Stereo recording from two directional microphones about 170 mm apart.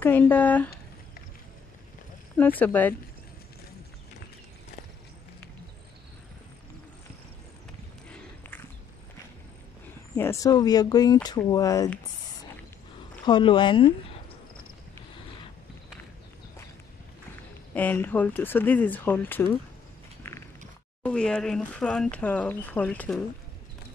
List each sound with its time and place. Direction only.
0.0 s speech: 10° left (ahead or behind)
2.3 s speech: 10° left (ahead or behind)
8.1 s walk: 10° left (ahead or behind)
10.1 s speech: 15° left (ahead or behind)
13.2 s speech: 30° left (ahead or behind)
17.7 s speech: 10° left (ahead or behind)
20.2 s a sound: 15° left (ahead or behind)
21.0 s speech: 5° left (ahead or behind)